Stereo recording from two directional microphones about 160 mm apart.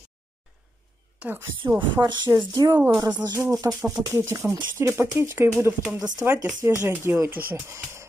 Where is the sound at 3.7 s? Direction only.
10° right (ahead or behind).